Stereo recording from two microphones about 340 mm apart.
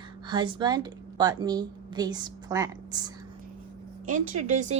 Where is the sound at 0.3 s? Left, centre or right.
Centre.